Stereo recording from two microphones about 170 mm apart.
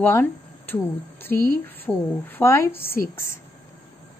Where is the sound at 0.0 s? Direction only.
10° left (ahead or behind).